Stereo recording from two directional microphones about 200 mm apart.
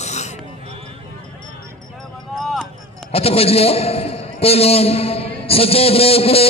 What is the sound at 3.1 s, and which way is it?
A man's voice, 30° left (ahead or behind).